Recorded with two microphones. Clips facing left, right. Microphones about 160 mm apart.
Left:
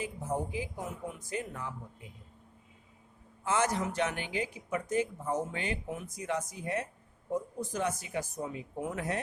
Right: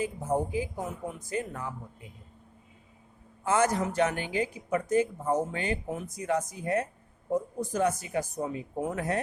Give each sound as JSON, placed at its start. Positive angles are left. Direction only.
{"t": 0.0, "sound": "speech", "side_deg": -40}
{"t": 3.4, "sound": "speech", "side_deg": -45}